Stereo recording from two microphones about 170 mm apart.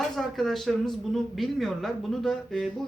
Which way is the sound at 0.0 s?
Centre (ahead or behind).